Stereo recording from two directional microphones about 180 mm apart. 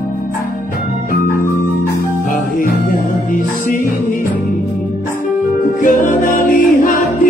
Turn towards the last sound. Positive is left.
turn(degrees=50)  # may be behind; listen again after turning